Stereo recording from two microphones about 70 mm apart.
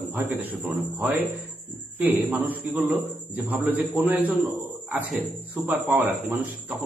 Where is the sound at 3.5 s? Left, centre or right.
Right.